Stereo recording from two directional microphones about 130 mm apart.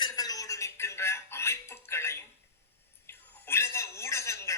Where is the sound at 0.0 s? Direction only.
30° left (ahead or behind).